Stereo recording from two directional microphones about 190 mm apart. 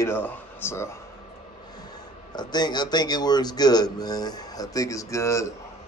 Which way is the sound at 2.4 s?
20° left (ahead or behind).